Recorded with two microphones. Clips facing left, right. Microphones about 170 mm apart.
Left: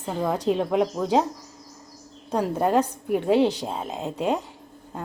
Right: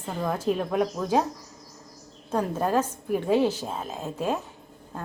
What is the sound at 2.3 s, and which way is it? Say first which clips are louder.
A woman's voice: left 3 dB; 15° left (ahead or behind).